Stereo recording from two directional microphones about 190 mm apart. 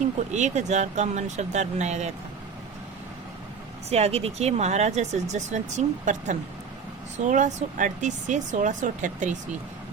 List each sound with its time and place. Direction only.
0.0 s speech: 40° right (ahead or behind)
3.8 s speech: 35° right (ahead or behind)